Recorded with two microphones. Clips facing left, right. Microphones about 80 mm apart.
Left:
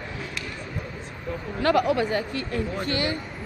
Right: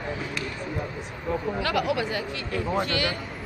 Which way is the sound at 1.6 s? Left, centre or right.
Left.